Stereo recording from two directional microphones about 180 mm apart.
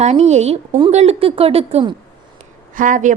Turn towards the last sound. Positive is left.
turn(degrees=-45)  # may be behind; listen again after turning